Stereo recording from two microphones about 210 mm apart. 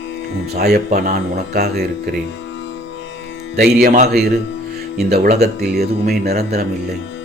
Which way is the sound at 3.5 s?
50° right (ahead or behind).